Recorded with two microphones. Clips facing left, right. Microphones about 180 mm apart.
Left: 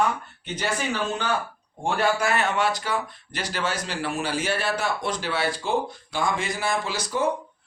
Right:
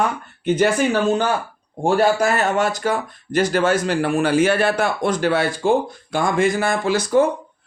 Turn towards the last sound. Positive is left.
turn(degrees=-50)  # may be behind; listen again after turning